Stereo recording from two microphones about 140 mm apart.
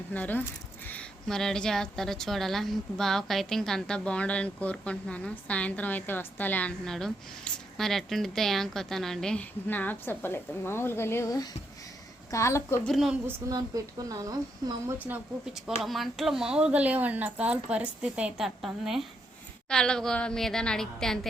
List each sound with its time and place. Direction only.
0.1 s a woman's voice: 10° left (ahead or behind)
12.8 s a woman's voice: centre (ahead or behind)
13.5 s a woman's voice: 25° right (ahead or behind)
14.9 s a woman's voice: 10° right (ahead or behind)